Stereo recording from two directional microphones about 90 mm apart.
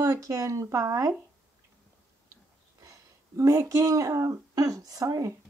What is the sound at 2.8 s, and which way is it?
Speech, 35° right (ahead or behind).